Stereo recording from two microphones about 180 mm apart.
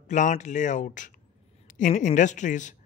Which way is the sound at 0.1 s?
45° left (ahead or behind).